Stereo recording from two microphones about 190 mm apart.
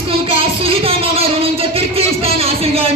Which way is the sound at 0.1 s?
30° right (ahead or behind).